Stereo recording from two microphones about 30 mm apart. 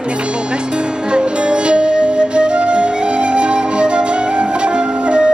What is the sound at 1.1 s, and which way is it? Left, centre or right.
Music, right.